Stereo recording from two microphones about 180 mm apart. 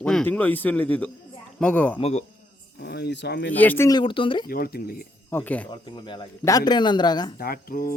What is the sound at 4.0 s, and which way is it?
Speech, 30° left (ahead or behind).